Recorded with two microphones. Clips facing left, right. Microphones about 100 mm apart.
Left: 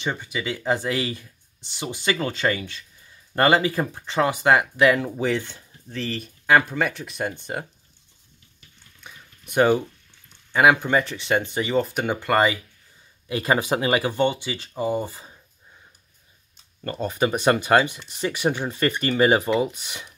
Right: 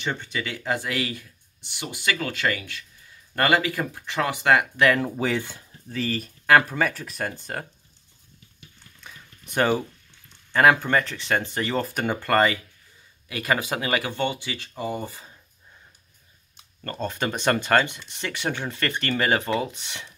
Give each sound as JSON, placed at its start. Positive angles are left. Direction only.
{"t": 0.0, "sound": "speech", "side_deg": 10}
{"t": 5.1, "sound": "speech", "side_deg": -5}
{"t": 9.0, "sound": "a sound", "side_deg": 5}
{"t": 10.5, "sound": "speech", "side_deg": 10}
{"t": 13.3, "sound": "speech", "side_deg": 25}
{"t": 16.9, "sound": "speech", "side_deg": 10}